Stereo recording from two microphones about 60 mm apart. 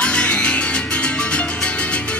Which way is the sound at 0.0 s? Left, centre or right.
Centre.